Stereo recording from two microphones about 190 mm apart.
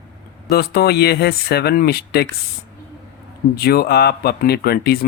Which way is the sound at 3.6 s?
55° left (ahead or behind).